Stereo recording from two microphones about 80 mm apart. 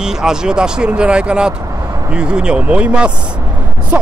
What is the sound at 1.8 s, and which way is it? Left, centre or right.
Vehicle, right.